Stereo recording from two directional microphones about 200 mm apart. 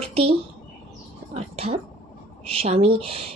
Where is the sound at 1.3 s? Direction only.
30° right (ahead or behind).